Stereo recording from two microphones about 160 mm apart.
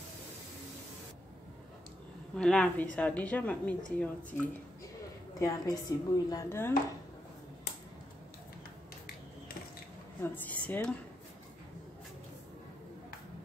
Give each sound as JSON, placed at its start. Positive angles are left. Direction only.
{"t": 2.3, "sound": "a woman's voice", "side_deg": 5}
{"t": 5.4, "sound": "speech", "side_deg": 20}
{"t": 10.2, "sound": "a woman's voice", "side_deg": 10}